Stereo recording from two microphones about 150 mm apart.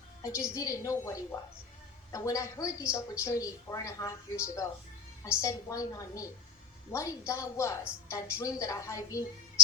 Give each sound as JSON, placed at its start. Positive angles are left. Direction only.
{"t": 0.2, "sound": "a woman's voice", "side_deg": 25}